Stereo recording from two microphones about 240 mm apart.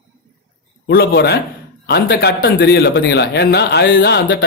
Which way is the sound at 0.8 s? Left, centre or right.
Left.